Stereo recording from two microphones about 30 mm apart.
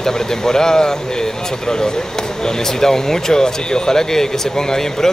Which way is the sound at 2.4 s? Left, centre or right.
Centre.